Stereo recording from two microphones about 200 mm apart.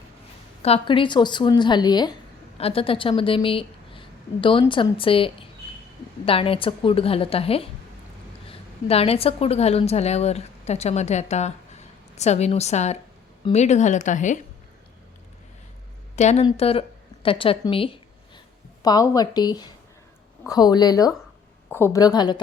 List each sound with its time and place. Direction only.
0.6 s a woman's voice: 30° left (ahead or behind)
16.1 s a woman's voice: 35° left (ahead or behind)